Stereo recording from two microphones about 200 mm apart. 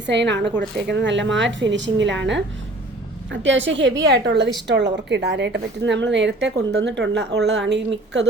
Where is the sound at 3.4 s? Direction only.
70° right (ahead or behind).